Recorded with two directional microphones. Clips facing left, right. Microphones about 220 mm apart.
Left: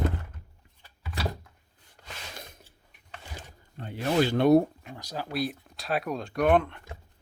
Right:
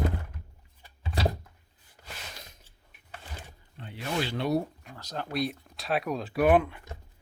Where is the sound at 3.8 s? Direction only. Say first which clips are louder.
Left 7 dB; 45° left (ahead or behind).